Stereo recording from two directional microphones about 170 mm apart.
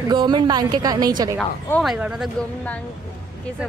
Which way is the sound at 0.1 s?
25° right (ahead or behind).